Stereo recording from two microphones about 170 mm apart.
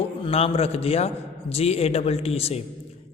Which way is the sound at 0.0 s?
35° left (ahead or behind).